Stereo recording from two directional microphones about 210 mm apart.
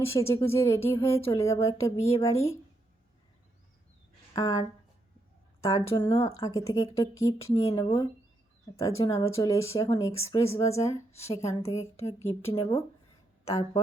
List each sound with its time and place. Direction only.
0.0 s speech: 10° left (ahead or behind)
4.4 s speech: 15° left (ahead or behind)
5.6 s speech: 15° left (ahead or behind)
10.6 s speech: 30° left (ahead or behind)
10.8 s speech: 15° left (ahead or behind)